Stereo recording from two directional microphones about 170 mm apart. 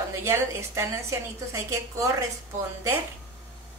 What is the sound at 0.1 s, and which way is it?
A woman's voice, 15° right (ahead or behind).